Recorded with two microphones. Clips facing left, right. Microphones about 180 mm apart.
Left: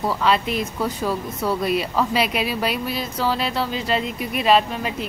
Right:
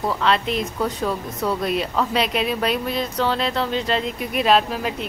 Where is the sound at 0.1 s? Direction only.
5° left (ahead or behind).